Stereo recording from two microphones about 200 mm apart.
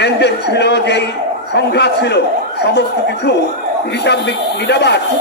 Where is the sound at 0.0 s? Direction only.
60° left (ahead or behind).